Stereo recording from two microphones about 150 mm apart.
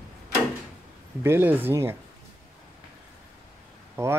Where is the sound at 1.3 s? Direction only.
15° right (ahead or behind).